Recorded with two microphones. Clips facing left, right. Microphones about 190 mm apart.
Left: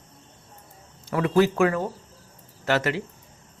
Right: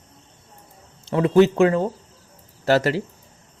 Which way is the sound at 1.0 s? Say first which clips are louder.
Right 5 dB; 25° right (ahead or behind).